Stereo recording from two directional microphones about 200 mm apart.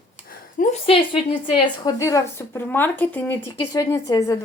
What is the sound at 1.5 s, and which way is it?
A woman's voice, 15° left (ahead or behind).